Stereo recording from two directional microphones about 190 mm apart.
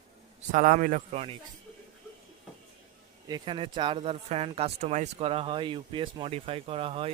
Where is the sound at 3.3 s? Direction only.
25° right (ahead or behind).